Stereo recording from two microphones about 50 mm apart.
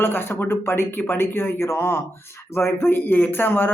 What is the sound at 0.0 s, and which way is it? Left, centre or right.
Speech, left.